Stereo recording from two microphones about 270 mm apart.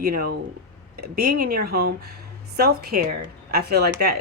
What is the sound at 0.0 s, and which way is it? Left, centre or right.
Speech, right.